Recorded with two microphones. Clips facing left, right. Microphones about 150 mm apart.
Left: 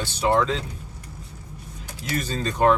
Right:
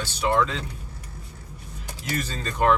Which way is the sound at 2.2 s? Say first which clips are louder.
Left 4 dB; 25° left (ahead or behind).